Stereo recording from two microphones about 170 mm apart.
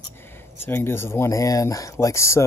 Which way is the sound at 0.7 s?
15° left (ahead or behind).